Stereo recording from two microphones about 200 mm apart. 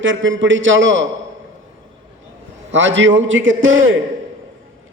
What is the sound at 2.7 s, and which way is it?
A man's voice, 65° right (ahead or behind).